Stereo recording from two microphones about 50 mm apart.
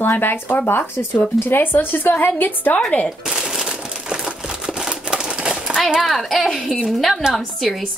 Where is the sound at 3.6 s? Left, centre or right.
Centre.